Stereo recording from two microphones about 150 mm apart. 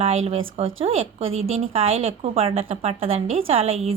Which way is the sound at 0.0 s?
45° right (ahead or behind).